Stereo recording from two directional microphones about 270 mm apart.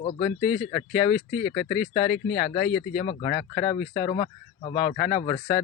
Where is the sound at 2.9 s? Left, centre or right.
Centre.